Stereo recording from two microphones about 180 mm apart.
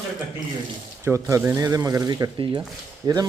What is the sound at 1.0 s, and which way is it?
Speech, 15° right (ahead or behind).